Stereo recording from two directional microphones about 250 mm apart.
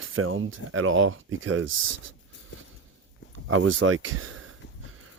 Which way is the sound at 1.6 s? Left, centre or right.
Right.